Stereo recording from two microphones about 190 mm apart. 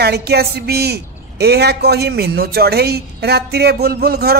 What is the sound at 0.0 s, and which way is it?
A woman's voice, 60° right (ahead or behind).